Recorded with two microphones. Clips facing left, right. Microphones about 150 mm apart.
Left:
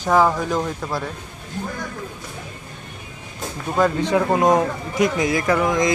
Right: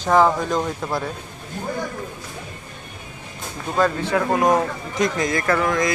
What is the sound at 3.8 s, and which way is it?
Speech, 15° left (ahead or behind).